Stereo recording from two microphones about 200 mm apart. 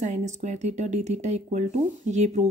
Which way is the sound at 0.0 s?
35° right (ahead or behind).